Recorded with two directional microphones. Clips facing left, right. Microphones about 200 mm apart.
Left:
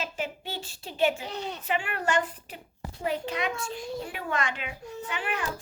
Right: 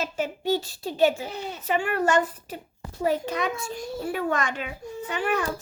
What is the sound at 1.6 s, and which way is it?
A child's voice, 40° right (ahead or behind).